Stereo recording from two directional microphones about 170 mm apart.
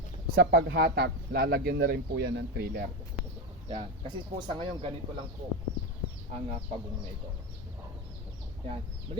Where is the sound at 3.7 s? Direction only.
35° right (ahead or behind).